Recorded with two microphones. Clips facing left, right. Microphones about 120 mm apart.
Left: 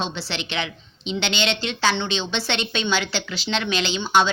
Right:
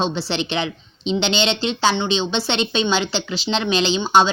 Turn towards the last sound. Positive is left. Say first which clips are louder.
# right 4 dB
turn(degrees=-25)  # may be behind; listen again after turning